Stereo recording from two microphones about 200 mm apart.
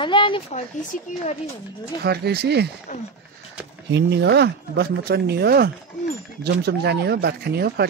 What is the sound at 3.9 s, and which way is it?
Speech, 60° right (ahead or behind).